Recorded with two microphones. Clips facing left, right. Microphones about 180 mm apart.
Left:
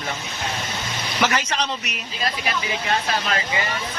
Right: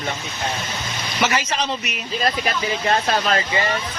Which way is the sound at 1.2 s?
5° right (ahead or behind).